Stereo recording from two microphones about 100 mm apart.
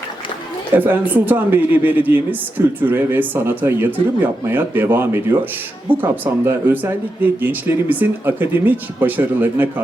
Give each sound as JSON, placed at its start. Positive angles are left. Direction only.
{"t": 0.8, "sound": "speech", "side_deg": -15}